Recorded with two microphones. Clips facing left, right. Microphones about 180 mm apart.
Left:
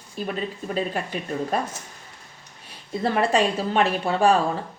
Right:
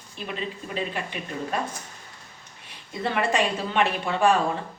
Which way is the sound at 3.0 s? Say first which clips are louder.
Left 3 dB; 35° left (ahead or behind).